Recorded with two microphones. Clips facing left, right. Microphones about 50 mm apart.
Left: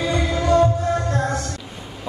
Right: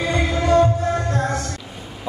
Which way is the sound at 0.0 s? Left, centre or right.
Right.